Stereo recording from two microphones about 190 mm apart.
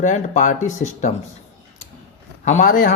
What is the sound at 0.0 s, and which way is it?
Speech, 40° left (ahead or behind).